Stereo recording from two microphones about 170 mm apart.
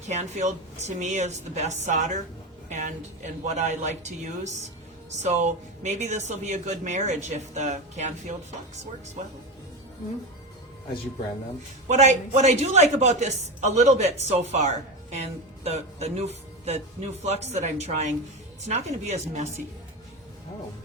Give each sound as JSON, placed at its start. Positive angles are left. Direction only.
{"t": 0.1, "sound": "speech", "side_deg": -45}
{"t": 11.9, "sound": "a woman's voice", "side_deg": -45}